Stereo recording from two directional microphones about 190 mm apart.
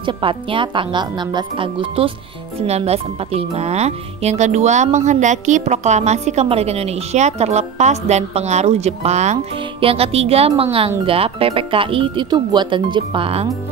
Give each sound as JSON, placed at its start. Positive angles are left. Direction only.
{"t": 0.0, "sound": "speech", "side_deg": -25}